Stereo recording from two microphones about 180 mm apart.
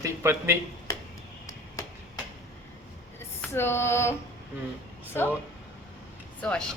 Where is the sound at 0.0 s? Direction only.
15° right (ahead or behind).